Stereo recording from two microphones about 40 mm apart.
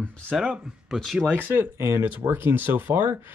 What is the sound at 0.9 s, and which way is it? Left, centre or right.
Speech, centre.